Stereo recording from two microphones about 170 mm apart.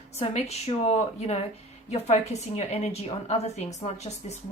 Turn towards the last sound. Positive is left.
turn(degrees=40)  # may be behind; listen again after turning